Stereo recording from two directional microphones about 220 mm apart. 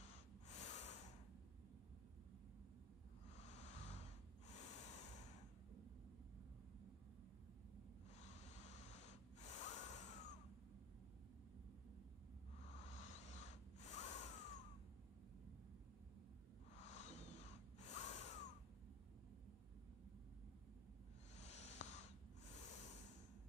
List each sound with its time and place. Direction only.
0.0 s snort: 30° left (ahead or behind)
3.3 s snort: 30° left (ahead or behind)
8.2 s snort: 30° left (ahead or behind)
12.8 s a sound: 30° left (ahead or behind)
16.7 s snort: 30° left (ahead or behind)
21.5 s a sound: 30° left (ahead or behind)